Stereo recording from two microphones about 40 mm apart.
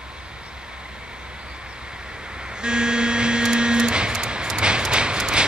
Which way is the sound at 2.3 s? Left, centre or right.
Right.